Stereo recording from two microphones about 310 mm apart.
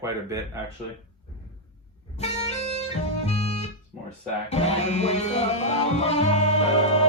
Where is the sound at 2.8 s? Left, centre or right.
Centre.